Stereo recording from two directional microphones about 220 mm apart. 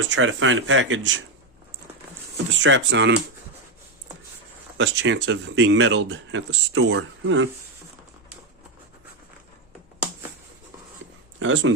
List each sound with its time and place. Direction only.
0.1 s speech: 60° right (ahead or behind)
2.6 s speech: 55° right (ahead or behind)
4.8 s speech: 55° right (ahead or behind)
11.3 s speech: 60° right (ahead or behind)